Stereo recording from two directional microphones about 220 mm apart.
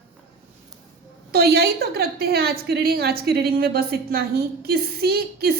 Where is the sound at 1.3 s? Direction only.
45° right (ahead or behind).